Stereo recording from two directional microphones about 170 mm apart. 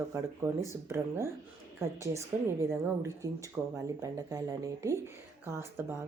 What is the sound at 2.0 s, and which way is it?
Speech, 20° right (ahead or behind).